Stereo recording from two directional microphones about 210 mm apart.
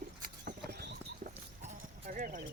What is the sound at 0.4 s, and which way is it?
Clip-clop, 45° right (ahead or behind).